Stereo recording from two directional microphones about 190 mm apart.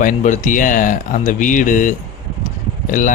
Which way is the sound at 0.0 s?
40° left (ahead or behind).